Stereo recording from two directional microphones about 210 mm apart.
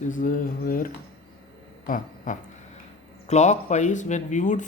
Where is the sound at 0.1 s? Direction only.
40° left (ahead or behind).